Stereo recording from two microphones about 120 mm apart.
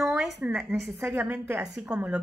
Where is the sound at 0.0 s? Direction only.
5° right (ahead or behind).